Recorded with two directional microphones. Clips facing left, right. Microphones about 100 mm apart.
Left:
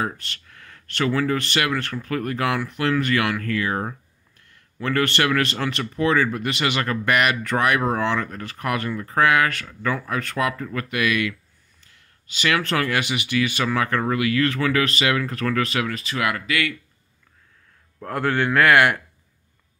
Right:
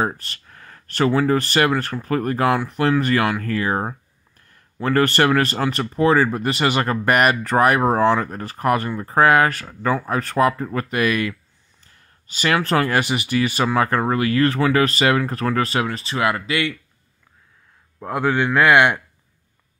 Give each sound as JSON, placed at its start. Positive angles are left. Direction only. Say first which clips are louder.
{"t": 0.0, "sound": "speech", "louder": "right 4 dB", "side_deg": -35}
{"t": 11.8, "sound": "a sound", "louder": "right 3 dB", "side_deg": -40}
{"t": 12.5, "sound": "speech", "louder": "right 6 dB", "side_deg": -30}
{"t": 17.9, "sound": "a man's voice", "louder": "right 3 dB", "side_deg": -15}